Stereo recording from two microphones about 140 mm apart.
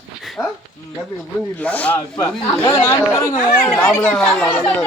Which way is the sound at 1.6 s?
10° left (ahead or behind).